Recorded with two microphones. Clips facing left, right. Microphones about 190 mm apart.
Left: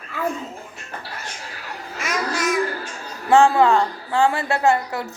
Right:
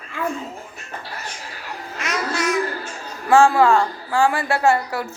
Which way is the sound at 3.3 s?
20° left (ahead or behind).